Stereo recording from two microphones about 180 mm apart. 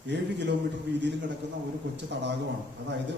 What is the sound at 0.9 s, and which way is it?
Speech, 70° right (ahead or behind).